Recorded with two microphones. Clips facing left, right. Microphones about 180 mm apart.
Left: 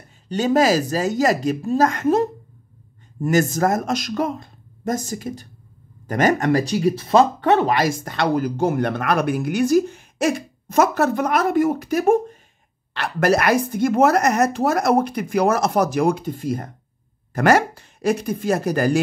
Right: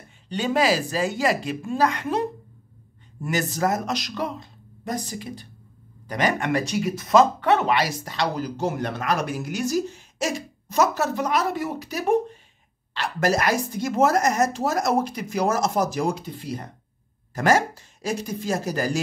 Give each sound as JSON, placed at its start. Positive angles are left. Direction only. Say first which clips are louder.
{"t": 0.3, "sound": "speech", "louder": "left 5 dB", "side_deg": 45}
{"t": 17.3, "sound": "speech", "louder": "left 4 dB", "side_deg": 65}